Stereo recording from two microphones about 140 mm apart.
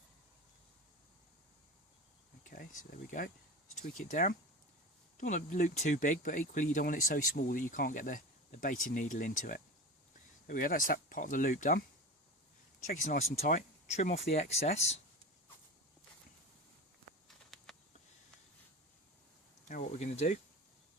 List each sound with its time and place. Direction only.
2.4 s speech: 80° left
10.4 s speech: 85° left
13.4 s speech: 65° left (ahead or behind)
17.2 s walk: centre (ahead or behind)
19.6 s speech: 55° left (ahead or behind)